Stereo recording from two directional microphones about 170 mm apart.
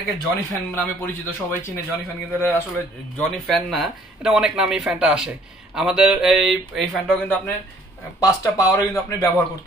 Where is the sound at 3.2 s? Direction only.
Centre (ahead or behind).